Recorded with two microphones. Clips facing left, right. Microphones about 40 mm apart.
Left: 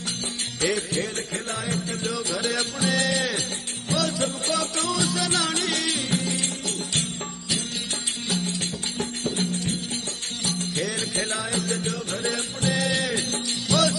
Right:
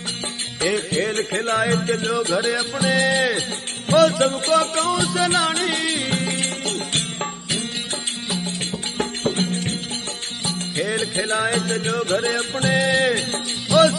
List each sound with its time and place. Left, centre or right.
0.6 s a man's voice: right
2.8 s music: right
3.9 s music: right
5.9 s music: right
8.5 s music: right
13.7 s music: right